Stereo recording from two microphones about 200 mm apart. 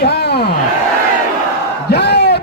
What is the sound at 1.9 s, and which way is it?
Crowd, 55° left (ahead or behind).